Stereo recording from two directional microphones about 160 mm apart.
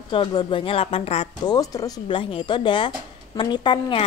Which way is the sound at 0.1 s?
30° left (ahead or behind).